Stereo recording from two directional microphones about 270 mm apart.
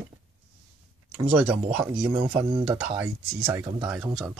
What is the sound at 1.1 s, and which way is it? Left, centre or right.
Speech, centre.